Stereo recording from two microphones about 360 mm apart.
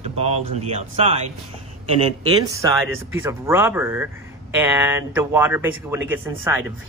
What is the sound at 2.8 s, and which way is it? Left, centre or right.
Speech, right.